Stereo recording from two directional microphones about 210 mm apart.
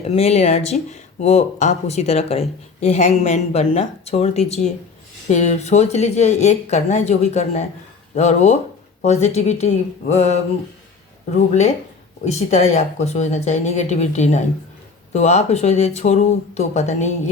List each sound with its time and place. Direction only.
0.0 s speech: 30° left (ahead or behind)